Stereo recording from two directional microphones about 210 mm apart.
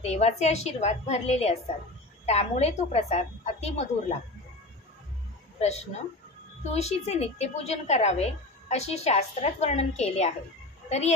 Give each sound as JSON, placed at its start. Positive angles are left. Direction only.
{"t": 0.0, "sound": "a woman's voice", "side_deg": 30}
{"t": 5.6, "sound": "a woman's voice", "side_deg": 30}